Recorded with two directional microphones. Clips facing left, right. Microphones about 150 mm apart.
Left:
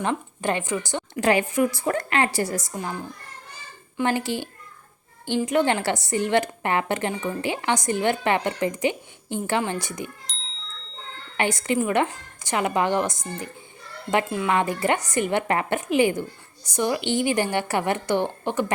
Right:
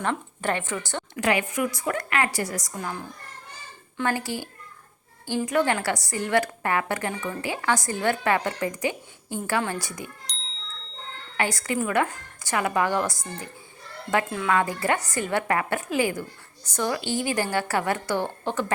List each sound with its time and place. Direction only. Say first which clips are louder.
0.0 s speech: left 2 dB; 15° left (ahead or behind)
1.1 s a woman's voice: left 4 dB; 30° left (ahead or behind)
3.9 s a woman's voice: left 3 dB; 20° left (ahead or behind)
10.3 s a sound: even; centre (ahead or behind)
11.3 s a woman's voice: left 3 dB; 20° left (ahead or behind)